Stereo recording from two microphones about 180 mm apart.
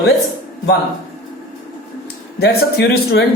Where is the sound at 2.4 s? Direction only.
65° left (ahead or behind).